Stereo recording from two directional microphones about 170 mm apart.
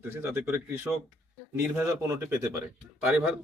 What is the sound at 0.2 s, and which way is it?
Speech, 10° right (ahead or behind).